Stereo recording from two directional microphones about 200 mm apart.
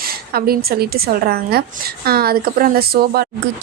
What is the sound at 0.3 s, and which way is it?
Speech, 50° right (ahead or behind).